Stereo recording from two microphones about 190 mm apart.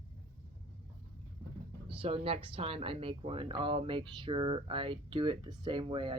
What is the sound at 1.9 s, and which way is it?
Speech, 30° right (ahead or behind).